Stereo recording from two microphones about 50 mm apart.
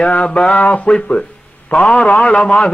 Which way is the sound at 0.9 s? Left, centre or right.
Centre.